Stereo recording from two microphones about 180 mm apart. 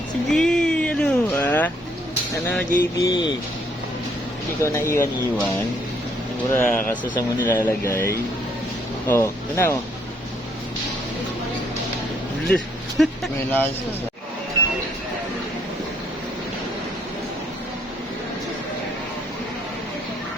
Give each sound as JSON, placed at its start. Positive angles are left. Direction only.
{"t": 0.3, "sound": "a sound", "side_deg": 5}
{"t": 2.3, "sound": "speech", "side_deg": 15}
{"t": 3.1, "sound": "speech", "side_deg": 25}
{"t": 4.6, "sound": "speech", "side_deg": 15}
{"t": 9.0, "sound": "speech", "side_deg": 15}
{"t": 13.0, "sound": "speech", "side_deg": 5}